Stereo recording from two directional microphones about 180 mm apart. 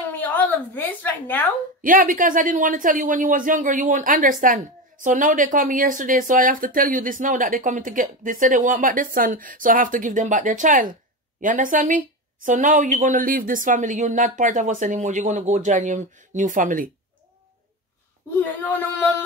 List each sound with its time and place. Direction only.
0.1 s a woman's voice: 10° left (ahead or behind)
1.8 s speech: 50° right (ahead or behind)
18.4 s speech: 10° left (ahead or behind)